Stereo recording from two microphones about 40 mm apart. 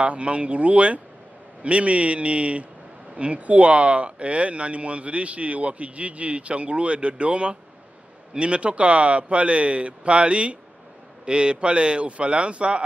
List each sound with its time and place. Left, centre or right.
0.0 s a man's voice: right